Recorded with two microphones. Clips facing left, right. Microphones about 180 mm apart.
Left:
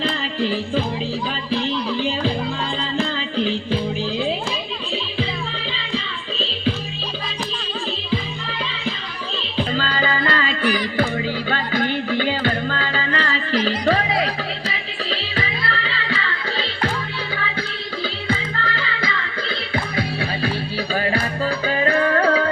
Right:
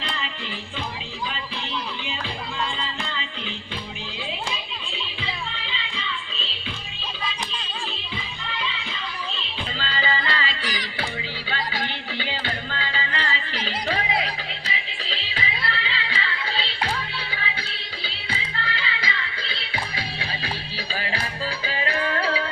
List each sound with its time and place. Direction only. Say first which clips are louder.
0.4 s music: left 12 dB; 40° left (ahead or behind)
3.0 s music: left 11 dB; 35° left (ahead or behind)
9.6 s music: left 9 dB; 45° left (ahead or behind)
18.3 s music: left 5 dB; 45° left (ahead or behind)
20.9 s music: left 8 dB; 45° left (ahead or behind)